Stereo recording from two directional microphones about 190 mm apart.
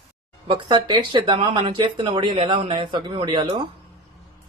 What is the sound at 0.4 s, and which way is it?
Speech, 25° right (ahead or behind).